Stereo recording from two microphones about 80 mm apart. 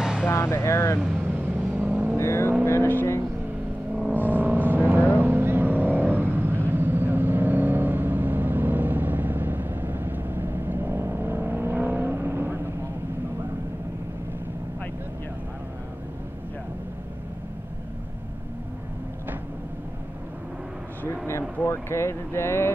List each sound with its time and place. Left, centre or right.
0.0 s vehicle: centre
0.3 s speech: left
1.1 s vehicle: right
2.1 s vehicle: left
4.1 s vehicle: right
21.6 s vehicle: left